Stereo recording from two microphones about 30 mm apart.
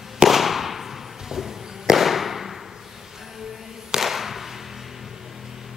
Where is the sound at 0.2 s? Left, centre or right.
Centre.